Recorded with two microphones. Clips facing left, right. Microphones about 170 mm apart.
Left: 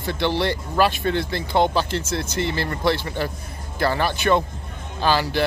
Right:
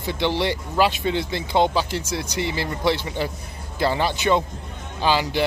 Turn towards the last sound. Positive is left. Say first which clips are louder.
# even
turn(degrees=-15)  # may be behind; listen again after turning